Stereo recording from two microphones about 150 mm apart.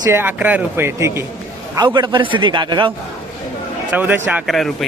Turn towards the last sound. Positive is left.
turn(degrees=0)  # may be behind; listen again after turning